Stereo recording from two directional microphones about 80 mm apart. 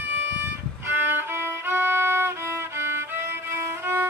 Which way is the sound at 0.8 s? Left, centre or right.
Right.